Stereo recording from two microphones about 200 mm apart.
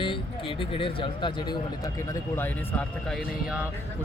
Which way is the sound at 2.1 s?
10° left (ahead or behind).